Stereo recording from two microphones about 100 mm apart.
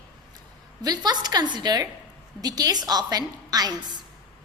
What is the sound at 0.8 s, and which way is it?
A woman's voice, 40° right (ahead or behind).